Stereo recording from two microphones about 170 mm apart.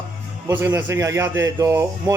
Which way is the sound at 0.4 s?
15° right (ahead or behind).